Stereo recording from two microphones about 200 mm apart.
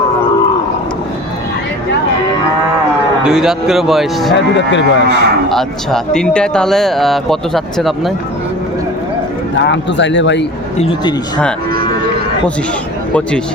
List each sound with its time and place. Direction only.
3.2 s speech: 5° right (ahead or behind)
4.4 s speech: 65° left (ahead or behind)
5.5 s speech: centre (ahead or behind)
9.6 s speech: 65° left (ahead or behind)
10.8 s speech: 30° left (ahead or behind)